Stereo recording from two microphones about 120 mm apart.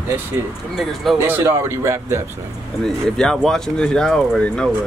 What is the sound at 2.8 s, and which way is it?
Speech, 5° left (ahead or behind).